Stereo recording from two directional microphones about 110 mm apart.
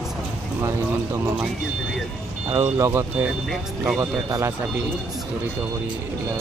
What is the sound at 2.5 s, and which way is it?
Speech, 25° right (ahead or behind).